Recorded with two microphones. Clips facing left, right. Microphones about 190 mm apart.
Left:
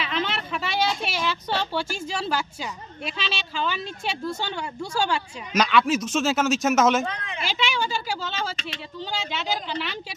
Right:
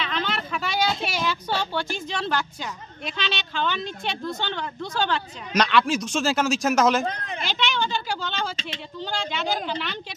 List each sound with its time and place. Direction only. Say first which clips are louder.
0.0 s speech: even; 5° left (ahead or behind)
7.1 s a woman's voice: right 2 dB; 40° right (ahead or behind)
7.4 s speech: even; 5° left (ahead or behind)